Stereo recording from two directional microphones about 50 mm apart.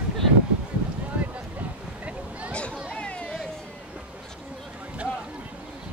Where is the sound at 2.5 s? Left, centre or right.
Left.